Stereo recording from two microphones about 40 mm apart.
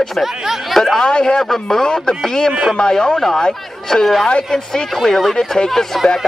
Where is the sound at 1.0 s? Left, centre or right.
Left.